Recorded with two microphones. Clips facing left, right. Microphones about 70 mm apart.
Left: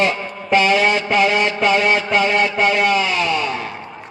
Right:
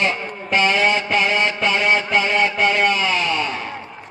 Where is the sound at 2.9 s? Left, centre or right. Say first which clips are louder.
Left 2 dB; left.